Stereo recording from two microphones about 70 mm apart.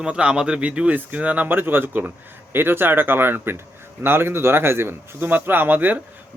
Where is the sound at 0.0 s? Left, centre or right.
Centre.